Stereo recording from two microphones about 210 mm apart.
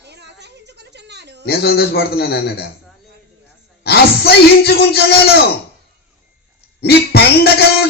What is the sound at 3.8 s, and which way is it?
A man's voice, 50° left (ahead or behind).